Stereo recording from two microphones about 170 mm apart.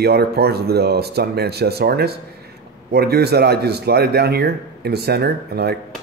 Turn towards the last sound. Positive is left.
turn(degrees=-70)  # may be behind; listen again after turning